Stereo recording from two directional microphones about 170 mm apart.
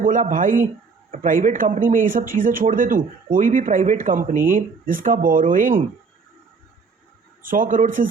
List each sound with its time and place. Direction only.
0.0 s speech: 50° right (ahead or behind)
7.4 s speech: 55° right (ahead or behind)